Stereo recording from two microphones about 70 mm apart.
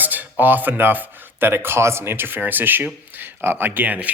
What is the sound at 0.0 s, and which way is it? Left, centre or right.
Speech, right.